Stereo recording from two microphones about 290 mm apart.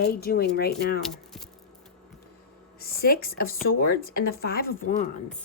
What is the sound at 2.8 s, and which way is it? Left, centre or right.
Speech, left.